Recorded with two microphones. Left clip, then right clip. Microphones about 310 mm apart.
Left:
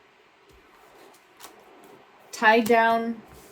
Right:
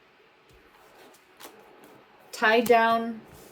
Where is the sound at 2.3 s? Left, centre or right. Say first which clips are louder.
Left 2 dB; centre.